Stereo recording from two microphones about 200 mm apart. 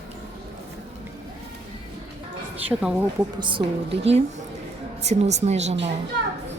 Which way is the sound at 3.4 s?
25° right (ahead or behind).